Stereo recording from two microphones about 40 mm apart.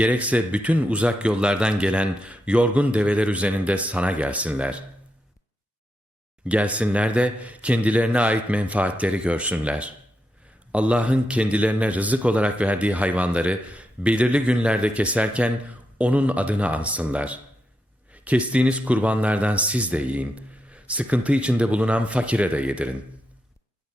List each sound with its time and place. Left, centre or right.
0.0 s speech: right
6.4 s speech: right